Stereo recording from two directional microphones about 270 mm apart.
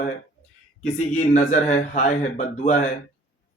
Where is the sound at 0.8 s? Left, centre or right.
Left.